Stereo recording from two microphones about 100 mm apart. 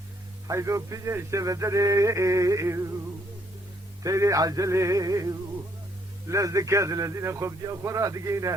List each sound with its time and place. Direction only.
0.4 s a man's voice: 30° right (ahead or behind)
4.0 s a man's voice: 35° right (ahead or behind)